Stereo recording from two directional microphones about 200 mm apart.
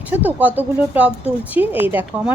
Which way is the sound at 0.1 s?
10° right (ahead or behind).